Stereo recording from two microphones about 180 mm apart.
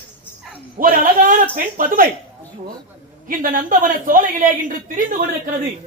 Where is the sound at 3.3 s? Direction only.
50° right (ahead or behind).